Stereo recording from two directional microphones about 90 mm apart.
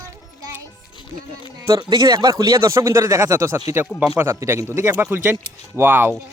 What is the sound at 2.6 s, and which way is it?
Speech, 30° right (ahead or behind).